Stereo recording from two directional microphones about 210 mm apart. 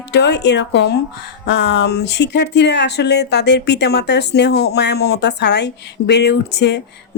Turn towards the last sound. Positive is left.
turn(degrees=55)  # may be behind; listen again after turning